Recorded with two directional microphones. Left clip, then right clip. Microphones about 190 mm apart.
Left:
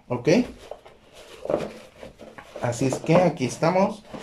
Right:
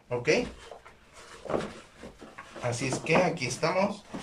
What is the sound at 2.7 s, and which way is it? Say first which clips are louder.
Speech: left 5 dB; 35° left (ahead or behind).